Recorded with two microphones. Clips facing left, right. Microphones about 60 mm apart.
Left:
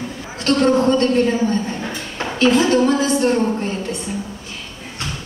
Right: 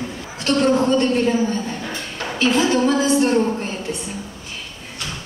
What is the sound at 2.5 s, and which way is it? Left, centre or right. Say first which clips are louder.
Speech: left 2 dB; centre.